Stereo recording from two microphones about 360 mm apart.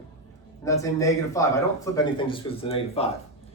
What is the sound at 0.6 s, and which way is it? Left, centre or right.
Speech, centre.